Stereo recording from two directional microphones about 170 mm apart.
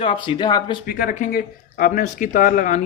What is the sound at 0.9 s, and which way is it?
A man's voice, 55° left (ahead or behind).